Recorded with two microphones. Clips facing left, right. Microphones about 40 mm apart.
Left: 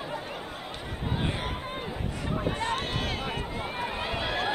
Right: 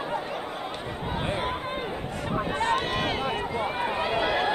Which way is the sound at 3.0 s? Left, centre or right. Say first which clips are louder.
Right 5 dB; centre.